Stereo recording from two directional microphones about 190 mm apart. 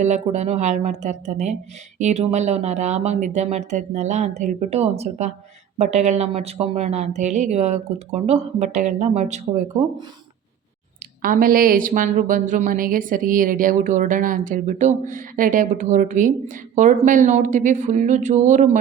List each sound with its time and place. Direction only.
0.0 s a woman's voice: 35° right (ahead or behind)
11.2 s a woman's voice: 45° right (ahead or behind)